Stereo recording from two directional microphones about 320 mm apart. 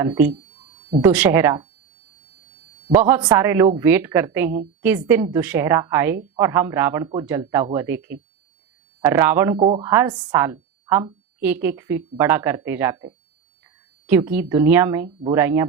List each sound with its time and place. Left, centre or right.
0.0 s a woman's voice: centre
1.1 s a woman's voice: centre
2.9 s a woman's voice: centre